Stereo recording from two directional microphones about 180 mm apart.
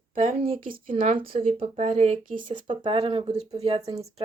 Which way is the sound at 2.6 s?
30° right (ahead or behind).